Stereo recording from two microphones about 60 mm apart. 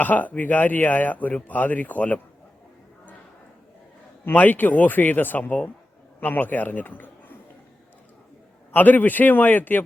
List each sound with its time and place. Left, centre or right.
0.0 s speech: left
4.3 s a man's voice: left
8.7 s a man's voice: left